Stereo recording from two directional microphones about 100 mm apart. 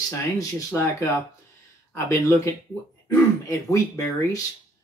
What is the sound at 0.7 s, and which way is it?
Speech, 25° left (ahead or behind).